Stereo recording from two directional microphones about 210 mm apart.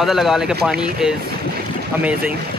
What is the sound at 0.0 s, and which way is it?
Speech, centre (ahead or behind).